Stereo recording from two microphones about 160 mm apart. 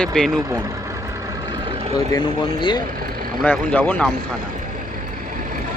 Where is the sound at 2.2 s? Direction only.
30° left (ahead or behind).